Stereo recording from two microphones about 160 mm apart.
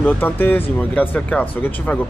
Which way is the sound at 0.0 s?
10° left (ahead or behind).